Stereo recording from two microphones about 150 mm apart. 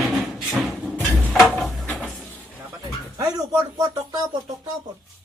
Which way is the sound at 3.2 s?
20° right (ahead or behind).